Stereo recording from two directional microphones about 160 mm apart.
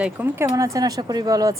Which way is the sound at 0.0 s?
10° right (ahead or behind).